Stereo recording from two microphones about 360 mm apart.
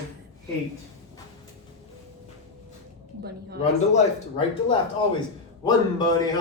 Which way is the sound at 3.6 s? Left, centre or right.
Centre.